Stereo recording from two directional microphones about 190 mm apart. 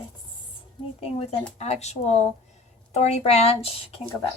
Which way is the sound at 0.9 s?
35° left (ahead or behind).